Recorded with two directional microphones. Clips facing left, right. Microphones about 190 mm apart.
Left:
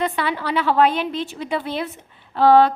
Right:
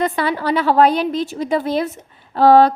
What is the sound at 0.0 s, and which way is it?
A woman's voice, 40° right (ahead or behind).